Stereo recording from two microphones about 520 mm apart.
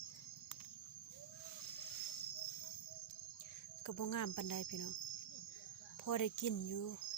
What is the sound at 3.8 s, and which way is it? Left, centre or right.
Cricket, left.